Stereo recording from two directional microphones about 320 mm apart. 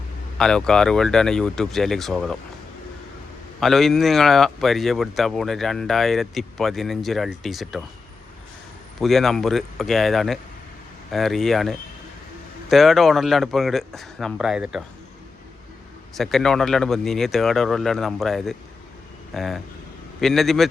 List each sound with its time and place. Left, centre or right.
0.3 s speech: centre
3.6 s speech: centre
9.0 s speech: centre
16.1 s speech: centre